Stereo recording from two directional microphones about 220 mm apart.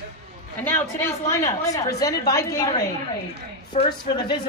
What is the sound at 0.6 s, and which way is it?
A woman's voice, 10° left (ahead or behind).